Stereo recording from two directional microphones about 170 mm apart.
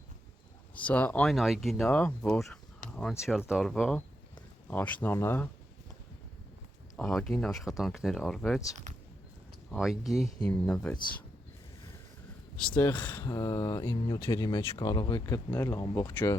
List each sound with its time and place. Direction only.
0.8 s speech: 10° left (ahead or behind)
1.8 s speech: 10° left (ahead or behind)
6.9 s speech: 5° left (ahead or behind)
9.7 s speech: centre (ahead or behind)
12.5 s speech: 5° left (ahead or behind)
13.3 s speech: 20° left (ahead or behind)